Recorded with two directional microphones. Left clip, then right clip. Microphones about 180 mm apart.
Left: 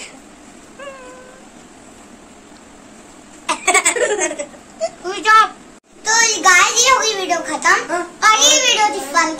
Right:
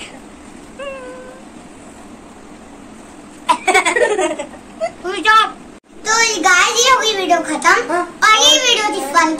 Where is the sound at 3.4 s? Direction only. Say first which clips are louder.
Right 3 dB; 55° left (ahead or behind).